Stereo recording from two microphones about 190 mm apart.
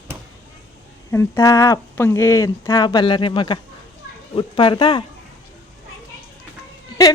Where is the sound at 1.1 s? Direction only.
15° left (ahead or behind).